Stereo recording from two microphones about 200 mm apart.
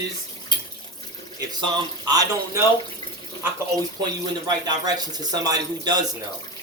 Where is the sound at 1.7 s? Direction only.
20° right (ahead or behind).